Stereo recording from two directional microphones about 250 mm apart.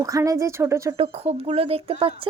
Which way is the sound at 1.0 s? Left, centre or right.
Right.